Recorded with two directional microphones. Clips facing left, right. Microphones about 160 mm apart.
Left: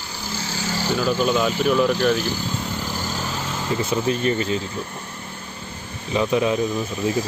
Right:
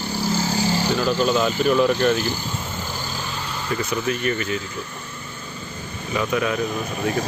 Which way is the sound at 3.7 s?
25° left (ahead or behind).